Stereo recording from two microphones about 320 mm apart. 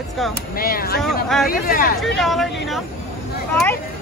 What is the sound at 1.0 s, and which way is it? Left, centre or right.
Speech, centre.